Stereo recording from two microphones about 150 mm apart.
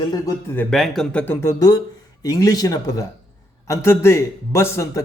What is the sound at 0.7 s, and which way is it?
Speech, centre (ahead or behind).